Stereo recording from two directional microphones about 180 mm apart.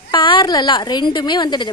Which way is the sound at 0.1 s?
25° left (ahead or behind).